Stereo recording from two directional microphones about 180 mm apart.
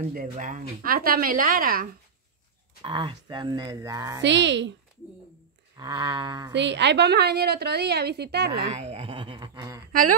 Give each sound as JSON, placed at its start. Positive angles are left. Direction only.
{"t": 0.1, "sound": "a woman's voice", "side_deg": -50}
{"t": 2.8, "sound": "speech", "side_deg": -25}
{"t": 4.2, "sound": "a woman's voice", "side_deg": -80}
{"t": 5.8, "sound": "speech", "side_deg": -20}
{"t": 6.5, "sound": "a woman's voice", "side_deg": -75}
{"t": 8.6, "sound": "speech", "side_deg": -35}